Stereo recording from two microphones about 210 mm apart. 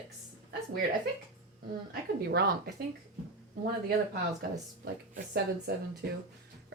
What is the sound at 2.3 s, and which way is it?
Speech, 50° right (ahead or behind).